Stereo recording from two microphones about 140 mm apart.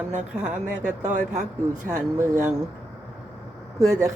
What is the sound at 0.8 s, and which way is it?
Speech, 60° right (ahead or behind).